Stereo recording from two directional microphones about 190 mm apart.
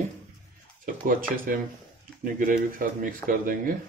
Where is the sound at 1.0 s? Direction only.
45° right (ahead or behind).